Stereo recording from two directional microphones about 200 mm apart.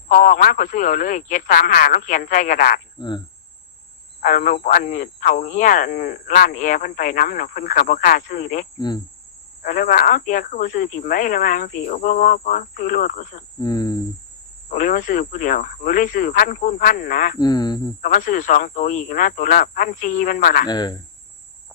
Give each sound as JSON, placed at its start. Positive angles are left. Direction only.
{"t": 0.1, "sound": "speech", "side_deg": 40}
{"t": 4.2, "sound": "speech", "side_deg": 45}
{"t": 9.6, "sound": "speech", "side_deg": 45}
{"t": 13.6, "sound": "a man's voice", "side_deg": 20}
{"t": 14.7, "sound": "speech", "side_deg": 40}
{"t": 17.4, "sound": "a man's voice", "side_deg": 20}
{"t": 18.0, "sound": "speech", "side_deg": 40}
{"t": 20.7, "sound": "a man's voice", "side_deg": 20}